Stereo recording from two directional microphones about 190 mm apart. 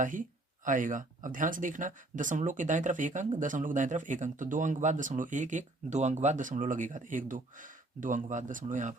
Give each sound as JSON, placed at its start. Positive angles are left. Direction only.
{"t": 0.0, "sound": "speech", "side_deg": -45}